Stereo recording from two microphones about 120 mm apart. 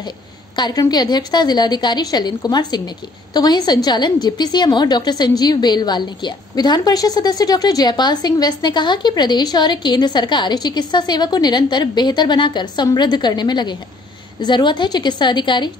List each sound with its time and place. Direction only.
0.6 s a woman's voice: 35° left (ahead or behind)